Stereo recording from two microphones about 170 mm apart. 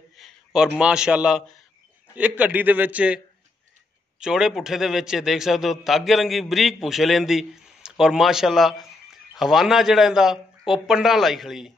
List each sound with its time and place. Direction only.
0.2 s a sound: 5° right (ahead or behind)
0.7 s a man's voice: 5° right (ahead or behind)
4.2 s a man's voice: 5° right (ahead or behind)